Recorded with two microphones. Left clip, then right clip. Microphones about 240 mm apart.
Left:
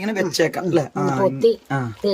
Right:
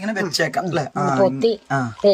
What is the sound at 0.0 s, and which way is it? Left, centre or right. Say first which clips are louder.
Speech: left 1 dB; centre.